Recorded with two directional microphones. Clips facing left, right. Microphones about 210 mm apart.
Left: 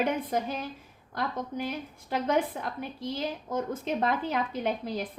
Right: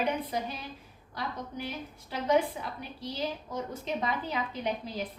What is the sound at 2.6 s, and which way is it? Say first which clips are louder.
A woman's voice: left 4 dB; 55° left (ahead or behind).